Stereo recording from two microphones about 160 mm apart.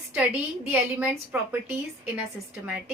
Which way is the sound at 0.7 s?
10° right (ahead or behind).